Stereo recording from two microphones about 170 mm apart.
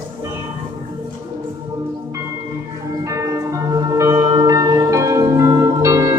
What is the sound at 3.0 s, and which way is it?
Tubular bells, 20° right (ahead or behind).